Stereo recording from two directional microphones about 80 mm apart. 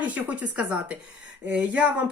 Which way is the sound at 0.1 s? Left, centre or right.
Centre.